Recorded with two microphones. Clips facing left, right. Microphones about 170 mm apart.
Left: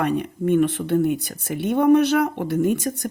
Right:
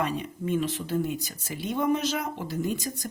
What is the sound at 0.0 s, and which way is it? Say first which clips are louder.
Speech: left 7 dB; 60° left (ahead or behind).